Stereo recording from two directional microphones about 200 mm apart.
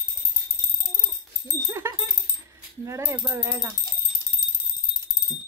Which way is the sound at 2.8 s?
15° right (ahead or behind).